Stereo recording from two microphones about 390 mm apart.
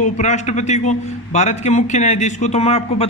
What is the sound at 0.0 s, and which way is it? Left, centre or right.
A man's voice, centre.